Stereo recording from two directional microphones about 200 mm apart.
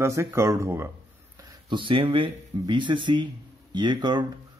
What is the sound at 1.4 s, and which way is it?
Speech, 25° right (ahead or behind).